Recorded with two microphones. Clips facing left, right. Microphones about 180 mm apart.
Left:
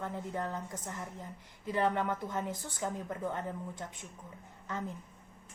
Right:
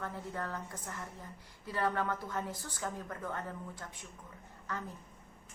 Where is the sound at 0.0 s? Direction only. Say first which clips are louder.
Left 3 dB; 20° left (ahead or behind).